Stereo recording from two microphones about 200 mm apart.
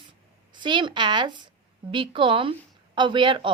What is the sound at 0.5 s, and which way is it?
A woman's voice, 25° right (ahead or behind).